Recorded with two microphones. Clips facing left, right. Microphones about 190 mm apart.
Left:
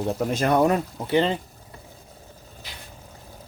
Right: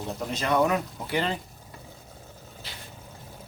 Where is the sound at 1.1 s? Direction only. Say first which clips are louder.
Left 8 dB; 25° left (ahead or behind).